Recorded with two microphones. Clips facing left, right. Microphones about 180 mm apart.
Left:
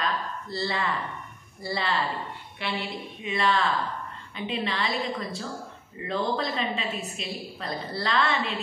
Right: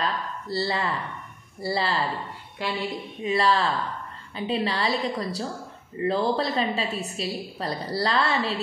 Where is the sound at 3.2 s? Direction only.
35° right (ahead or behind).